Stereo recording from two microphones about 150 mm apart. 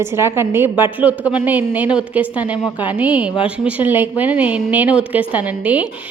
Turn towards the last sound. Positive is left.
turn(degrees=-10)  # may be behind; listen again after turning